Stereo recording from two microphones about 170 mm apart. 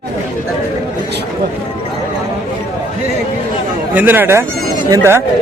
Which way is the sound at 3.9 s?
10° right (ahead or behind).